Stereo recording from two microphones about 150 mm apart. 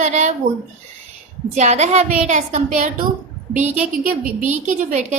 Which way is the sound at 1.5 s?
50° right (ahead or behind).